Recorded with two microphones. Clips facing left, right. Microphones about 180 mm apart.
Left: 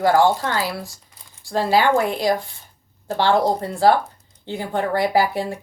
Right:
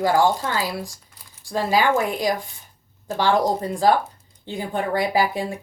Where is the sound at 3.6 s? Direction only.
15° right (ahead or behind).